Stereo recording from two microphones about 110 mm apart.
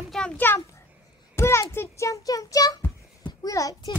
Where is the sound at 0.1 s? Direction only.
Centre (ahead or behind).